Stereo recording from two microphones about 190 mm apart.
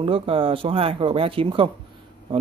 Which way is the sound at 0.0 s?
30° right (ahead or behind).